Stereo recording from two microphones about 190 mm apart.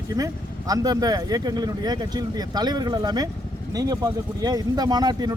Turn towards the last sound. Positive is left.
turn(degrees=-20)  # may be behind; listen again after turning